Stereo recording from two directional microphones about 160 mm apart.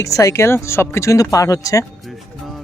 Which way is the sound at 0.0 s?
20° left (ahead or behind).